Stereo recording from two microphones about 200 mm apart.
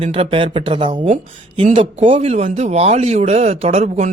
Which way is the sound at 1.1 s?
35° right (ahead or behind).